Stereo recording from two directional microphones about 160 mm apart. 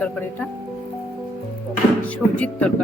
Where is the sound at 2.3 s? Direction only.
10° left (ahead or behind).